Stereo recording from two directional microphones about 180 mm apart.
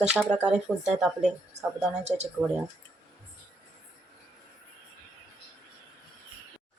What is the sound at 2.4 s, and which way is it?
Speech, 5° left (ahead or behind).